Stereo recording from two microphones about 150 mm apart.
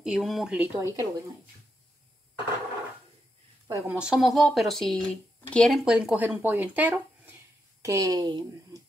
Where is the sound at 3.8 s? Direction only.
10° right (ahead or behind).